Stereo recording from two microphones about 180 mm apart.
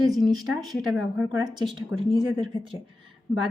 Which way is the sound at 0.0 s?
Centre (ahead or behind).